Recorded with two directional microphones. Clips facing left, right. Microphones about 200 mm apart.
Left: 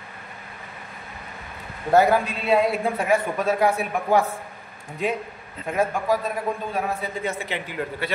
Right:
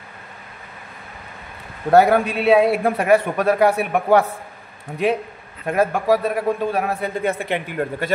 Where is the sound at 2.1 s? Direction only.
65° right (ahead or behind).